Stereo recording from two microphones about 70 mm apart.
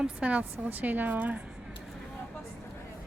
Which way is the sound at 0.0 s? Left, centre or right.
Centre.